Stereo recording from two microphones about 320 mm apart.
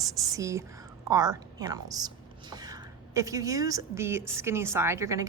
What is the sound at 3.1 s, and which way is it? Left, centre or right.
Speech, centre.